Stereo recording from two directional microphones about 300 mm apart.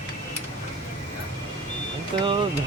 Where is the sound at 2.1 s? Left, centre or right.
Centre.